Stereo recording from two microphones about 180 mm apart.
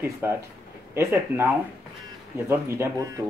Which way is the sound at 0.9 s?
15° right (ahead or behind).